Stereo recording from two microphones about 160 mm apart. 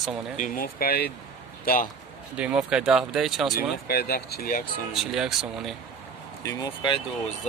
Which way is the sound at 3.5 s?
80° left.